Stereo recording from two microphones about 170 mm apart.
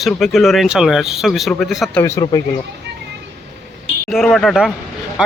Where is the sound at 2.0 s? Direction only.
20° left (ahead or behind).